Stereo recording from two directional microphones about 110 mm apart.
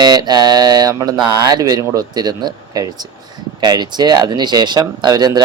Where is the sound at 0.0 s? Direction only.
40° right (ahead or behind).